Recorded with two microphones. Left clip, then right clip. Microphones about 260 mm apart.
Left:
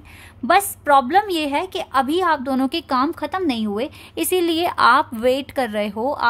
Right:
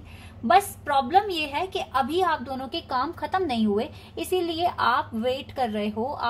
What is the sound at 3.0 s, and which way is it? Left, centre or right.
Speech, left.